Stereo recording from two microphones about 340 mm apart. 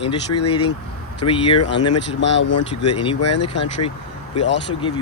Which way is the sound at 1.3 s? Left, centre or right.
Centre.